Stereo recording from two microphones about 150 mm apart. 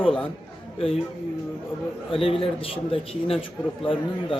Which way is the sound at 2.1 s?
40° left (ahead or behind).